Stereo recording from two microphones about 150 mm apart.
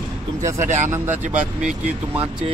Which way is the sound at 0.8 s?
15° right (ahead or behind).